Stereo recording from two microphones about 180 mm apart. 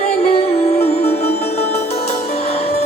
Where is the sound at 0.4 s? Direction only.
35° left (ahead or behind).